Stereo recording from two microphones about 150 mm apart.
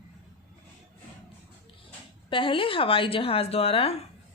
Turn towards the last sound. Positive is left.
turn(degrees=40)  # may be behind; listen again after turning